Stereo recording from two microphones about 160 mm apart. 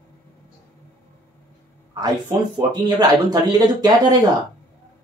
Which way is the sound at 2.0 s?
25° right (ahead or behind).